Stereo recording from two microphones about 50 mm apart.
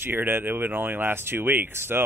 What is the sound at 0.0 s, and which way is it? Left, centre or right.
Speech, right.